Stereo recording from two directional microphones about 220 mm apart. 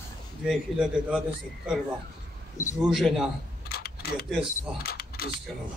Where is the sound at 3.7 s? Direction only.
45° left (ahead or behind).